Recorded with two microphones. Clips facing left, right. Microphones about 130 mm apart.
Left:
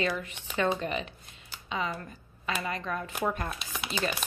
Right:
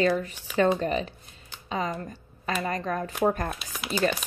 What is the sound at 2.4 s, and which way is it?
Speech, 40° right (ahead or behind).